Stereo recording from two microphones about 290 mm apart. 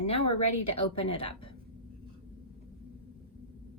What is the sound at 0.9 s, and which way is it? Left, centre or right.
Speech, centre.